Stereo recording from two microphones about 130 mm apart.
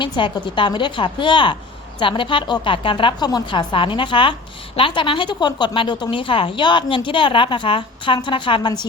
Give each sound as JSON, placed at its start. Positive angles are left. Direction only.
{"t": 0.0, "sound": "a woman's voice", "side_deg": 40}